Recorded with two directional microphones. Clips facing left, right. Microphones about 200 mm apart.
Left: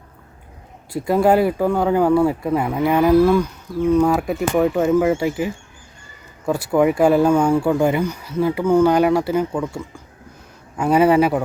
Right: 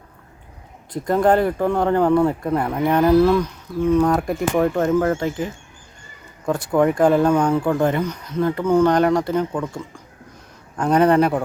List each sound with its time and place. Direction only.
0.9 s a man's voice: 5° left (ahead or behind)